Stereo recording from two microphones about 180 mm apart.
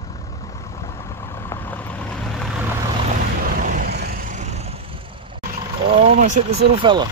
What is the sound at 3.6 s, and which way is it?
Vehicle, 50° right (ahead or behind).